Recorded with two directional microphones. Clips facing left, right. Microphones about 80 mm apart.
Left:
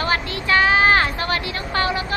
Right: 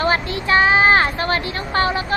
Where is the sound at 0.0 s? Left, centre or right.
Right.